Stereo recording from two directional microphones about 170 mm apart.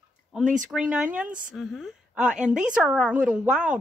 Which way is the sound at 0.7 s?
5° right (ahead or behind).